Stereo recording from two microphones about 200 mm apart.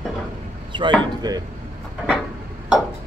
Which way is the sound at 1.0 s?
20° right (ahead or behind).